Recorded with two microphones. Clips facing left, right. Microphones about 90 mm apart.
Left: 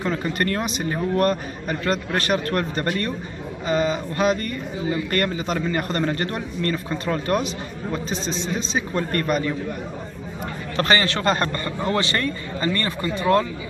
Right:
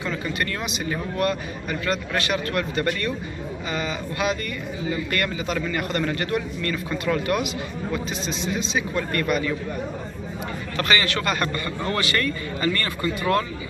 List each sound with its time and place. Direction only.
0.0 s speech: 45° left (ahead or behind)
10.8 s a man's voice: 35° left (ahead or behind)